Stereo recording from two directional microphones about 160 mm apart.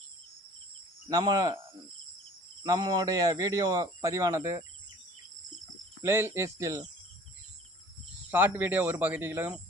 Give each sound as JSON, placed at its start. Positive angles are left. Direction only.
{"t": 1.0, "sound": "speech", "side_deg": -25}
{"t": 2.6, "sound": "speech", "side_deg": -25}
{"t": 6.0, "sound": "speech", "side_deg": -15}
{"t": 8.3, "sound": "speech", "side_deg": -10}